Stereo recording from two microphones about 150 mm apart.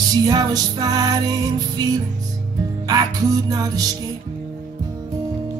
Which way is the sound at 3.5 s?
25° right (ahead or behind).